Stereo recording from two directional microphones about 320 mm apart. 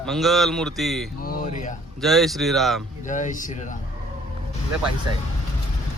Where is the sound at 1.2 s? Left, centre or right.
Left.